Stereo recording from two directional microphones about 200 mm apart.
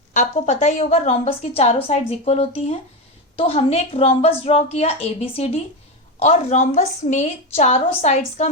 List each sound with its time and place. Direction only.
0.1 s a woman's voice: 35° left (ahead or behind)
6.1 s a woman's voice: 30° left (ahead or behind)